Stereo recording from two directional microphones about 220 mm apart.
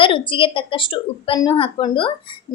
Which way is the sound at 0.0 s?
25° left (ahead or behind).